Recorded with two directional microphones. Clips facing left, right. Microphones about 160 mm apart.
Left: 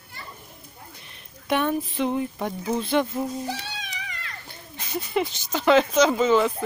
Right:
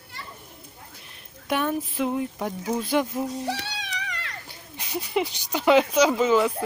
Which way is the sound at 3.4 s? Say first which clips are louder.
Right 2 dB; 75° right (ahead or behind).